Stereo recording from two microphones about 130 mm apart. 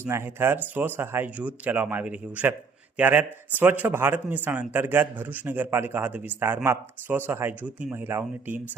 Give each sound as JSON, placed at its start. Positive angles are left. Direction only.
{"t": 0.0, "sound": "a man's voice", "side_deg": -20}